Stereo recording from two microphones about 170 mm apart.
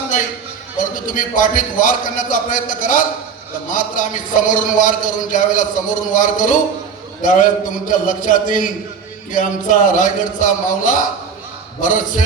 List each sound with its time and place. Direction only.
1.0 s a man's voice: 50° left (ahead or behind)